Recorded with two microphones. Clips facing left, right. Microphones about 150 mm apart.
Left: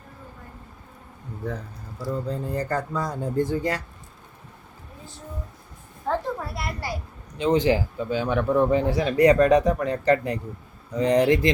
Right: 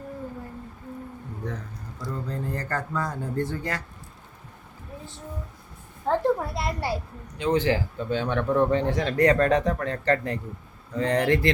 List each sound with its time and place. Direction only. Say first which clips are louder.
2.0 s speech: left 4 dB; 10° left (ahead or behind)
6.1 s a sound: right 4 dB; 25° right (ahead or behind)
7.3 s speech: left 3 dB; 20° left (ahead or behind)